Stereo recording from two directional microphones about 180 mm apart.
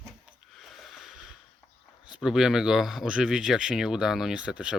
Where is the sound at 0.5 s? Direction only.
Centre (ahead or behind).